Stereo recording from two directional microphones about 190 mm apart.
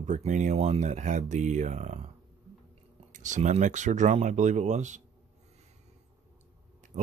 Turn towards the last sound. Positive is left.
turn(degrees=-35)  # may be behind; listen again after turning